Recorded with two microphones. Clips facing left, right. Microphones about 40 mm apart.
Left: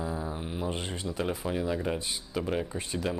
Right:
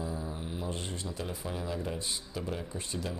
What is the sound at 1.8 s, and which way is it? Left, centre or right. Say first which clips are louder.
Speech: left 4 dB; left.